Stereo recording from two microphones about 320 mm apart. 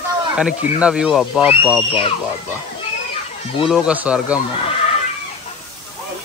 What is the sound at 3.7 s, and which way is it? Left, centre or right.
Speech, centre.